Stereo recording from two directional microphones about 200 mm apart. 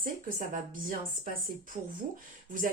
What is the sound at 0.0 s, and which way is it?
Speech, 45° right (ahead or behind).